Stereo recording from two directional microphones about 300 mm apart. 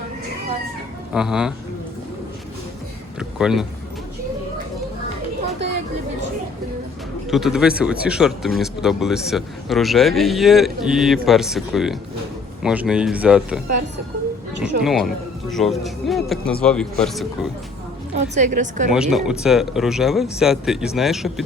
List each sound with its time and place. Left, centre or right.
1.1 s speech: centre
3.2 s a sound: centre
7.3 s speech: centre
14.6 s speech: centre
18.1 s a woman's voice: right
18.9 s speech: centre